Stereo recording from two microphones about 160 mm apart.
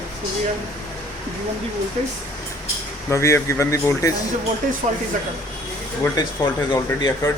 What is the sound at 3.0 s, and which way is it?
Speech, 20° left (ahead or behind).